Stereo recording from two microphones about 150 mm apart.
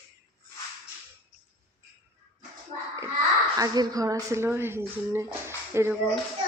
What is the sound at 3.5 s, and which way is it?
Speech, 25° right (ahead or behind).